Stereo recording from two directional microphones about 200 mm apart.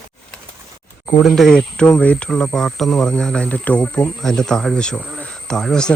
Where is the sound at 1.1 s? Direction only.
5° left (ahead or behind).